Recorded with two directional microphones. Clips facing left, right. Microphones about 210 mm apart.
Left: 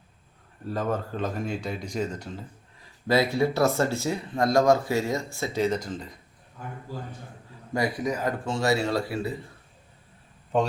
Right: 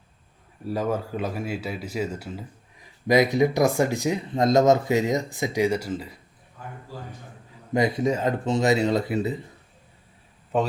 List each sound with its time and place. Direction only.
0.6 s speech: 10° right (ahead or behind)
7.7 s speech: 20° right (ahead or behind)
10.5 s speech: 5° right (ahead or behind)